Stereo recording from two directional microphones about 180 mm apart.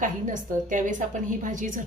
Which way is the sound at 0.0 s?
45° right (ahead or behind).